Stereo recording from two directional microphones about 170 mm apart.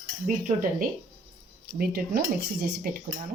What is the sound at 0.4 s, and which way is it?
A woman's voice, 55° right (ahead or behind).